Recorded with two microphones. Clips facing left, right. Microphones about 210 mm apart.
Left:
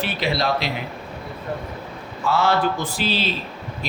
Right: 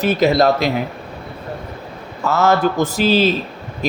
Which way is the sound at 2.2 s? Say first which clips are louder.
Right 4 dB; 45° right (ahead or behind).